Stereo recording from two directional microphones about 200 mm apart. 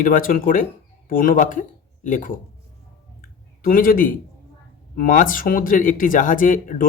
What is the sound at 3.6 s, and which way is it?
A man's voice, 45° left (ahead or behind).